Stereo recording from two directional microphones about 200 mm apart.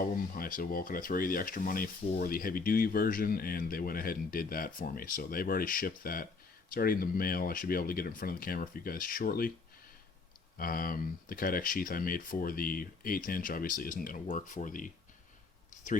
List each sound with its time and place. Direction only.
0.0 s speech: 45° left (ahead or behind)
10.6 s speech: 45° left (ahead or behind)